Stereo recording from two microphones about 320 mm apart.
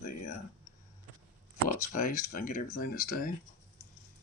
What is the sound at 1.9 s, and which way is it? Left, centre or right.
Speech, left.